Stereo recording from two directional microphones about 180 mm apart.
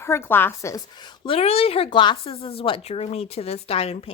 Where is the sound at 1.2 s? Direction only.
35° left (ahead or behind).